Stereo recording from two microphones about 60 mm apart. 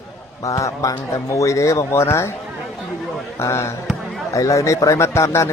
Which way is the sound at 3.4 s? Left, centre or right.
Left.